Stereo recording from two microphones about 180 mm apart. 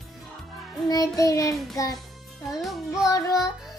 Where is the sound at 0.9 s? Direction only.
20° left (ahead or behind).